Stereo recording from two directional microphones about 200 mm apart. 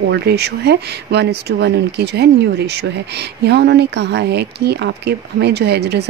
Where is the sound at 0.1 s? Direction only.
55° right (ahead or behind).